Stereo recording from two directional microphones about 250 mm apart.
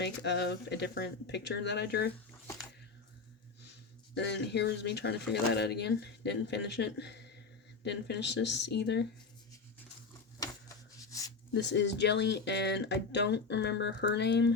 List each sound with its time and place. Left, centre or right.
0.0 s speech: left
4.1 s speech: left
11.5 s speech: left